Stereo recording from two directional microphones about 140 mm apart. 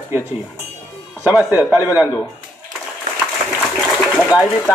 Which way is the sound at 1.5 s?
15° right (ahead or behind).